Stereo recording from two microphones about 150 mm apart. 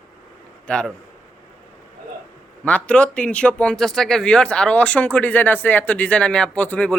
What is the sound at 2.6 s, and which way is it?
Speech, 10° left (ahead or behind).